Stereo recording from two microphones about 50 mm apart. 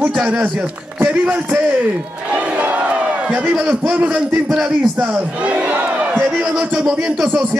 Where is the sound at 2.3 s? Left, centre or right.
Right.